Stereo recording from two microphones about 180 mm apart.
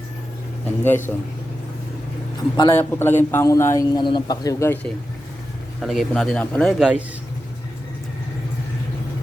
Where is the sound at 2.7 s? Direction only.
15° left (ahead or behind).